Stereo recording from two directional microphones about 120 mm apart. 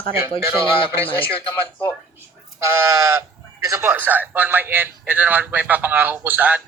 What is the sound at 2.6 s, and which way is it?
Speech, 25° right (ahead or behind).